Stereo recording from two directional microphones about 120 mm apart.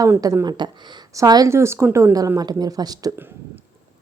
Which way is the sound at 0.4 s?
40° right (ahead or behind).